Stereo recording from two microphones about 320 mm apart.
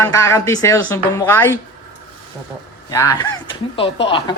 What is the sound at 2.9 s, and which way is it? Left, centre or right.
Speech, centre.